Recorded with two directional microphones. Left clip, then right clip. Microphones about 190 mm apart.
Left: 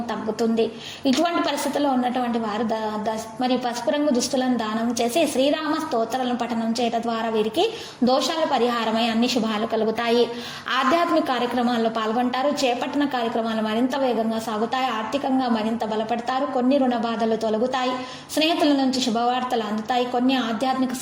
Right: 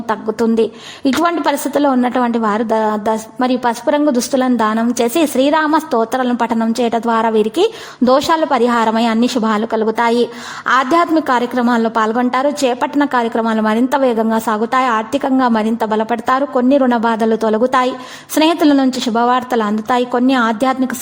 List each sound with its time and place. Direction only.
0.1 s a woman's voice: 45° right (ahead or behind)